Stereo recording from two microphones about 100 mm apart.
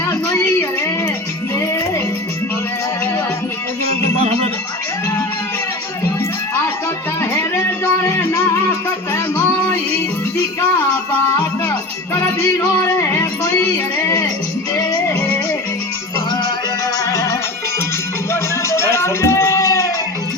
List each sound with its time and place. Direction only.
0.3 s a sound: 25° left (ahead or behind)
8.0 s music: 30° left (ahead or behind)
12.1 s music: 30° left (ahead or behind)
14.8 s music: 35° left (ahead or behind)
17.1 s music: 30° left (ahead or behind)